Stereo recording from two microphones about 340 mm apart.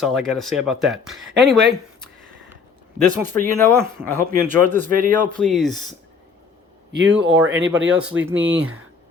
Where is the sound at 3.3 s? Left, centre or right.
Centre.